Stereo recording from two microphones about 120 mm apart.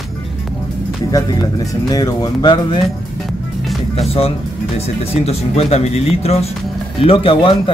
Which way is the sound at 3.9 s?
60° left (ahead or behind).